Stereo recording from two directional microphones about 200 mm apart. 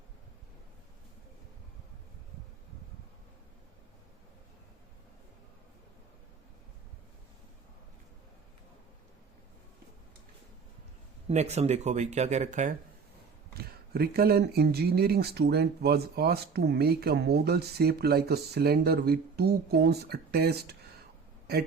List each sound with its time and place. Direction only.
11.3 s speech: 35° right (ahead or behind)
13.6 s speech: 50° right (ahead or behind)